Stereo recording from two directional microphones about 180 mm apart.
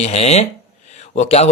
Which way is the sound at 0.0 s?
35° left (ahead or behind).